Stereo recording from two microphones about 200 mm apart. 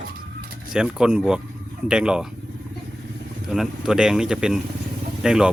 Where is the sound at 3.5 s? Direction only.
Centre (ahead or behind).